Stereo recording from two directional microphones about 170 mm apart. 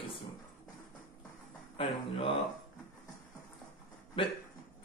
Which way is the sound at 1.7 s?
30° left (ahead or behind).